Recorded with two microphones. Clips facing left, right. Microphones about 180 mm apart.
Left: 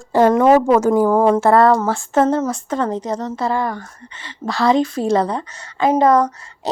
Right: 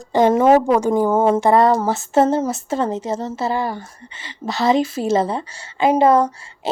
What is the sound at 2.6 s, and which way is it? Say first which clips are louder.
A woman's voice: even; 25° right (ahead or behind).